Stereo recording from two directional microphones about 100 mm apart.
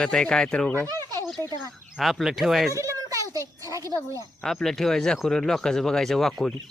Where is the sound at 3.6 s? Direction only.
35° right (ahead or behind).